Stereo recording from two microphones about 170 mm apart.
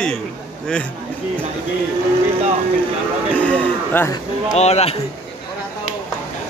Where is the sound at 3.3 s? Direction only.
10° left (ahead or behind).